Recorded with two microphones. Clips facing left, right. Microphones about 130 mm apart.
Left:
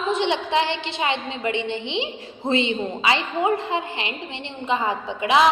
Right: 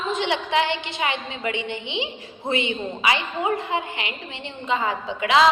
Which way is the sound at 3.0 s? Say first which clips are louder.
Left 1 dB; 25° left (ahead or behind).